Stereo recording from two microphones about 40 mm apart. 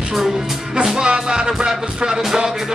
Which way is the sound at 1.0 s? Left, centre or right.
Right.